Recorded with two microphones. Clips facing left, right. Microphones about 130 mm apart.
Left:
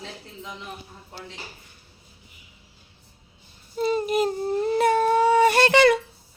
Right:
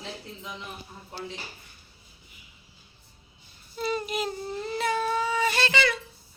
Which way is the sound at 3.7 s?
40° left (ahead or behind).